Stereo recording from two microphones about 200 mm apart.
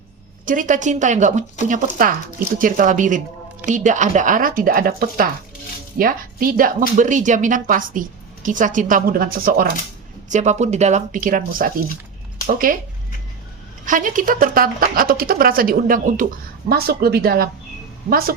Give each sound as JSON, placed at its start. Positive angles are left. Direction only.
{"t": 0.4, "sound": "a woman's voice", "side_deg": -40}
{"t": 10.2, "sound": "a woman's voice", "side_deg": -35}
{"t": 13.8, "sound": "a woman's voice", "side_deg": -40}